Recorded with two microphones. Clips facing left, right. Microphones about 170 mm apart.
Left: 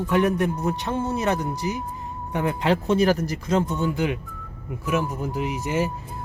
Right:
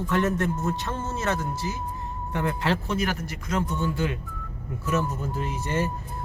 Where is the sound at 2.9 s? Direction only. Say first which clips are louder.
Left 8 dB; 35° left (ahead or behind).